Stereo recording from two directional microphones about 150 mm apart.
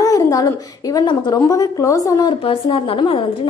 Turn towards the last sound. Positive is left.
turn(degrees=35)  # may be behind; listen again after turning